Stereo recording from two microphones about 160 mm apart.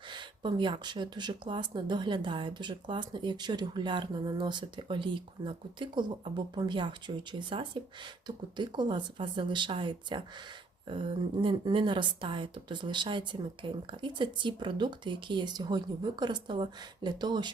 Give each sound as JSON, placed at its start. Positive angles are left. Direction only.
{"t": 0.1, "sound": "speech", "side_deg": -30}